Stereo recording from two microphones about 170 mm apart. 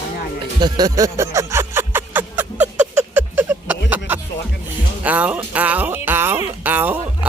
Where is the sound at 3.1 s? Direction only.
10° right (ahead or behind).